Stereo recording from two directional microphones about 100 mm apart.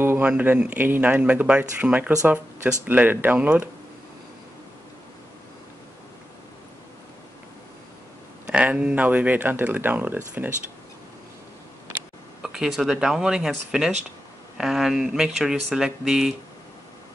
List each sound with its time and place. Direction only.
0.0 s a sound: 20° right (ahead or behind)
0.3 s speech: 15° right (ahead or behind)
8.5 s speech: 10° right (ahead or behind)
12.4 s speech: 5° right (ahead or behind)